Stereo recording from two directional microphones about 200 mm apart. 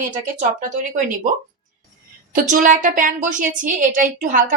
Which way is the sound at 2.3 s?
40° right (ahead or behind).